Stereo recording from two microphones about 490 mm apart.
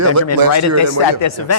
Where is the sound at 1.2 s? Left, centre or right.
Left.